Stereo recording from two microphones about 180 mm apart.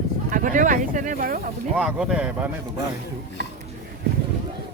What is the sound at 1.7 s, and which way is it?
Speech, 5° right (ahead or behind).